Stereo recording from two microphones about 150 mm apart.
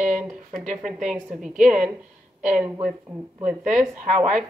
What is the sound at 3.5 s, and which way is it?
Speech, 55° right (ahead or behind).